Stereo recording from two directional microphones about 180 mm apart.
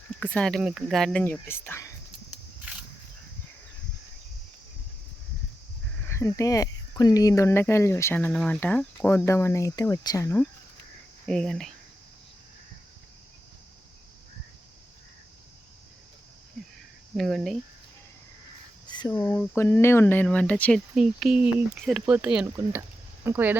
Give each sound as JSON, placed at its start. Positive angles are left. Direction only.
{"t": 0.2, "sound": "speech", "side_deg": 5}
{"t": 6.1, "sound": "speech", "side_deg": 15}
{"t": 11.3, "sound": "speech", "side_deg": 5}
{"t": 17.2, "sound": "speech", "side_deg": 0}
{"t": 18.9, "sound": "a sound", "side_deg": 25}
{"t": 19.1, "sound": "speech", "side_deg": 10}
{"t": 20.9, "sound": "speech", "side_deg": -5}